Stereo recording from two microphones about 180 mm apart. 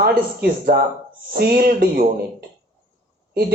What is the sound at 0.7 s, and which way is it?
A woman's voice, 55° right (ahead or behind).